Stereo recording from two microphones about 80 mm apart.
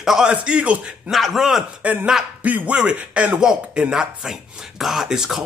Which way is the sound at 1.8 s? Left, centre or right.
Centre.